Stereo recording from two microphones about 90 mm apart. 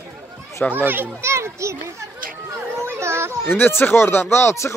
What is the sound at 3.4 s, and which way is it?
Speech, 25° left (ahead or behind).